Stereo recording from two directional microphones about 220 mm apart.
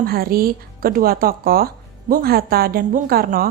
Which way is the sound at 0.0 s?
45° right (ahead or behind).